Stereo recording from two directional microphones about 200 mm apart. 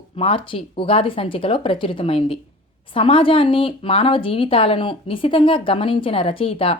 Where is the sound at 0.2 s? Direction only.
25° left (ahead or behind).